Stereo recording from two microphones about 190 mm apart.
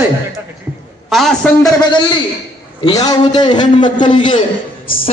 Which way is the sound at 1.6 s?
20° left (ahead or behind).